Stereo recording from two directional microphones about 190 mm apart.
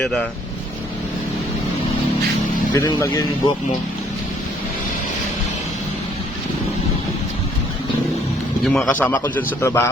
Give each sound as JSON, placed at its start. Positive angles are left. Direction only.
{"t": 0.0, "sound": "speech", "side_deg": 5}
{"t": 2.7, "sound": "a man's voice", "side_deg": 15}
{"t": 8.6, "sound": "a man's voice", "side_deg": 0}